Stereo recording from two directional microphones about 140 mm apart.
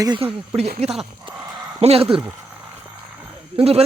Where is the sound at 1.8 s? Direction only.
45° right (ahead or behind).